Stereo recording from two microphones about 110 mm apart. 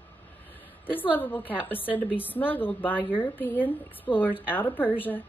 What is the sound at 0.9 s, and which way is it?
A woman's voice, 15° left (ahead or behind).